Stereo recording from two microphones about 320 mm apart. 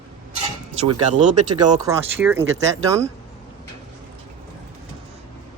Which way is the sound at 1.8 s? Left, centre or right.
Centre.